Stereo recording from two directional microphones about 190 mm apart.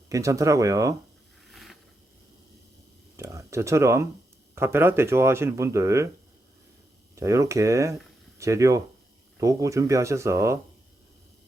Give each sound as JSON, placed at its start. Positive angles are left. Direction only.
{"t": 0.1, "sound": "speech", "side_deg": -15}
{"t": 1.5, "sound": "a sound", "side_deg": 0}
{"t": 3.2, "sound": "speech", "side_deg": -15}
{"t": 7.2, "sound": "speech", "side_deg": -15}